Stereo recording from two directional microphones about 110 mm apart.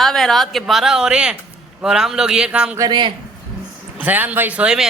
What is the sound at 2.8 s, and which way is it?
Speech, 40° right (ahead or behind).